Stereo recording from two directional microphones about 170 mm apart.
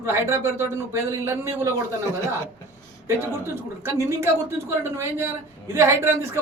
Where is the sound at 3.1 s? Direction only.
15° right (ahead or behind).